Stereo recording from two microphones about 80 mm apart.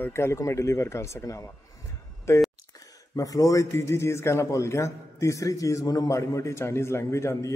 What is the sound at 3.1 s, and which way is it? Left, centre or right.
A man's voice, left.